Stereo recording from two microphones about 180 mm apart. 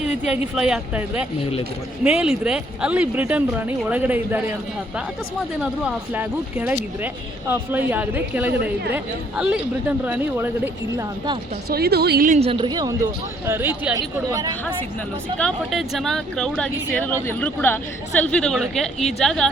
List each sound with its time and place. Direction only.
0.0 s speech: 5° right (ahead or behind)
5.5 s speech: 5° right (ahead or behind)
10.0 s speech: 10° right (ahead or behind)
11.7 s a woman's voice: 60° right (ahead or behind)
12.3 s speech: 30° right (ahead or behind)
15.4 s speech: centre (ahead or behind)